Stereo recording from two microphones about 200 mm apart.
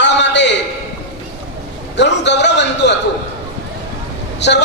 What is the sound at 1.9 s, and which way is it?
A man's voice, 60° left (ahead or behind).